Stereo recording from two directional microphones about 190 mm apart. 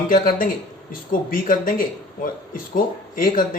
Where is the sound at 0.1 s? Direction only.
45° left (ahead or behind).